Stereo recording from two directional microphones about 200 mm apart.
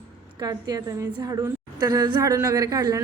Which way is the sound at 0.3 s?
20° right (ahead or behind).